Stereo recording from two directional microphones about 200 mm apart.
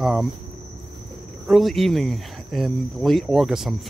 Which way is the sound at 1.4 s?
Centre (ahead or behind).